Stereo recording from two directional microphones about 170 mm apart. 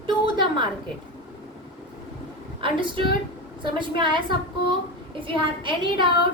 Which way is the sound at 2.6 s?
30° right (ahead or behind).